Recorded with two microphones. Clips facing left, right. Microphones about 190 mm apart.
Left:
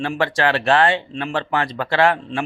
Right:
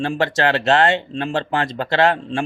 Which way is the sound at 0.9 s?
35° right (ahead or behind).